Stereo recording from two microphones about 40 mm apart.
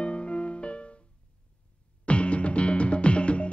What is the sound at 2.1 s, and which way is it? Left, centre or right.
Music, left.